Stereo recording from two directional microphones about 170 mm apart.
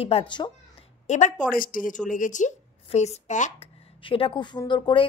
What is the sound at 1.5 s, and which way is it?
A woman's voice, 55° left (ahead or behind).